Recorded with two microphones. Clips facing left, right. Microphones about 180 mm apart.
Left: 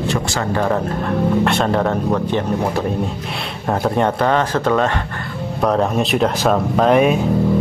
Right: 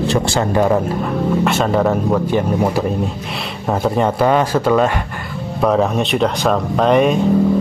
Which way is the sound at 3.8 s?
Centre (ahead or behind).